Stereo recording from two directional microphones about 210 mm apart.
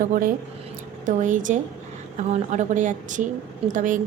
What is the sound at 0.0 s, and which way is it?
A woman's voice, 40° right (ahead or behind).